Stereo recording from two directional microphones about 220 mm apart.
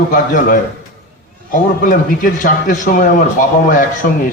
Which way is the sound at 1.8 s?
35° left (ahead or behind).